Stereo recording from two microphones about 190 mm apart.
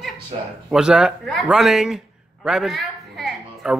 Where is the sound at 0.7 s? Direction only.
5° right (ahead or behind).